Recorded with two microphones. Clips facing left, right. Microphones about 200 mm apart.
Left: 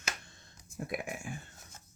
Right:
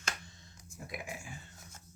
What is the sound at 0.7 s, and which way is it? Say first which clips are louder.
Speech: left 6 dB; 60° left (ahead or behind).